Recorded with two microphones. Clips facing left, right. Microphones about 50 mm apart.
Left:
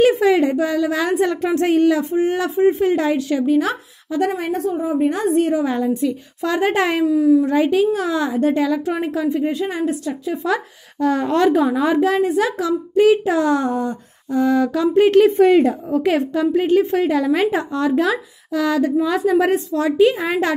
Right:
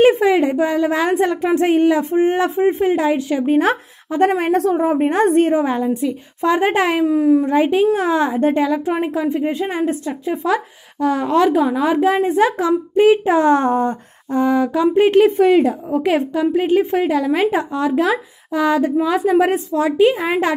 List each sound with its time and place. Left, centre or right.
0.2 s a woman's voice: centre
3.4 s speech: right
4.3 s a woman's voice: right
4.6 s a woman's voice: right
4.9 s a child's voice: right
5.8 s a woman's voice: centre
7.1 s a child's voice: right
7.4 s a woman's voice: right
10.4 s a woman's voice: centre
12.0 s a woman's voice: centre
12.3 s a child's voice: right
14.4 s a woman's voice: centre
15.9 s a woman's voice: centre
18.1 s a woman's voice: right